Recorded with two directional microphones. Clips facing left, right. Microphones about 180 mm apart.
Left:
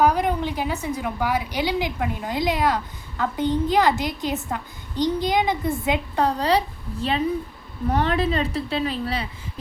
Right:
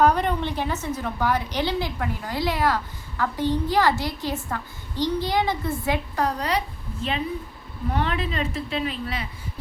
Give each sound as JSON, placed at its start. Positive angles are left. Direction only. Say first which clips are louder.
{"t": 0.0, "sound": "a woman's voice", "louder": "even", "side_deg": 10}
{"t": 7.9, "sound": "a woman's voice", "louder": "left 5 dB", "side_deg": 40}